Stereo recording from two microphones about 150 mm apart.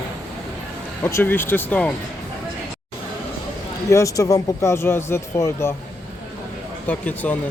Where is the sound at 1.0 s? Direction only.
15° left (ahead or behind).